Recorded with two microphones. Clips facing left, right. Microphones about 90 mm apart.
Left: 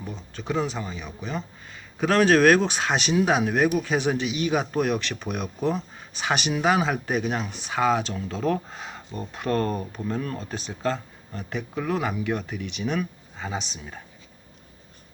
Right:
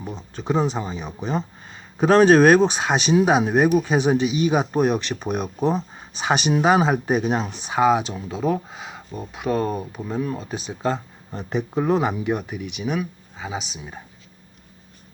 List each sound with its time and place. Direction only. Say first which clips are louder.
0.0 s speech: right 4 dB; 20° right (ahead or behind)